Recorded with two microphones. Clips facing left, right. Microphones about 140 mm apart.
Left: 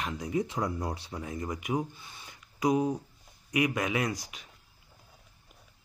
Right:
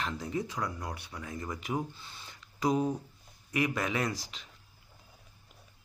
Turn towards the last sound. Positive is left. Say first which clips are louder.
# left 2 dB
turn(degrees=15)  # may be behind; listen again after turning